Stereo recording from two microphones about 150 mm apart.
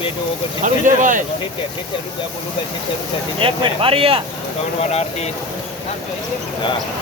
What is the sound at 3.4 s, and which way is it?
Speech, 40° right (ahead or behind).